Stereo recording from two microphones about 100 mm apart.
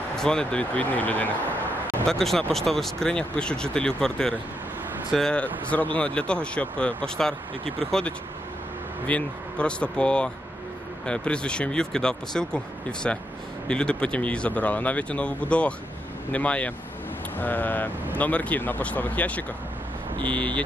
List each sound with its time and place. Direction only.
0.1 s speech: 5° left (ahead or behind)
2.0 s speech: 5° left (ahead or behind)